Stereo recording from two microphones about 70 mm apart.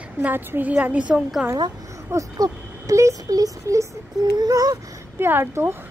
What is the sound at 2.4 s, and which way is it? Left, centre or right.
Speech, right.